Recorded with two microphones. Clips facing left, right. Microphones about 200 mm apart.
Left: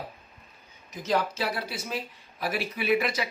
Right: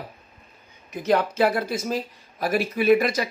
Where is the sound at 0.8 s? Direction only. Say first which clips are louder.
Right 6 dB; 60° right (ahead or behind).